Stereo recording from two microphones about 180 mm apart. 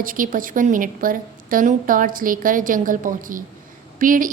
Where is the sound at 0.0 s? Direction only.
50° right (ahead or behind).